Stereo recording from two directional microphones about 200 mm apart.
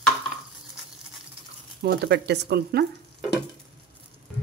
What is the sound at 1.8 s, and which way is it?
Speech, 55° right (ahead or behind).